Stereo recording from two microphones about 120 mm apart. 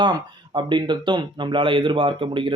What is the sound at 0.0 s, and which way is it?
Speech, 40° right (ahead or behind).